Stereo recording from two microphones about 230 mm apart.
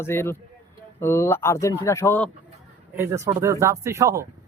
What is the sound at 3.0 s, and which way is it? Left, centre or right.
A man's voice, centre.